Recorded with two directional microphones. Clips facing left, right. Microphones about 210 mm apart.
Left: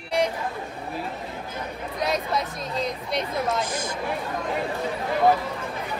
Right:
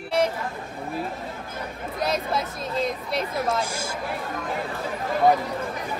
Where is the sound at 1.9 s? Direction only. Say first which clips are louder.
Even; centre (ahead or behind).